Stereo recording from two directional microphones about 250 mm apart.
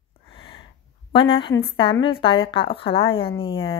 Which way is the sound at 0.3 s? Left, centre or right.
Left.